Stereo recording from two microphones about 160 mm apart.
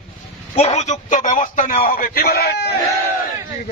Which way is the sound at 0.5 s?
45° left (ahead or behind).